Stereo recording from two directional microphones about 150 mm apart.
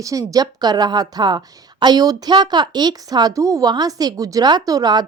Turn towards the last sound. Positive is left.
turn(degrees=-25)  # may be behind; listen again after turning